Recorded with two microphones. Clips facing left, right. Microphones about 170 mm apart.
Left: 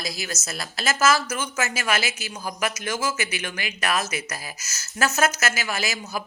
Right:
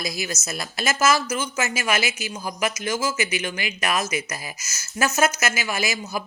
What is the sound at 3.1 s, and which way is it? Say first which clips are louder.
Speech: right 4 dB; 50° left (ahead or behind).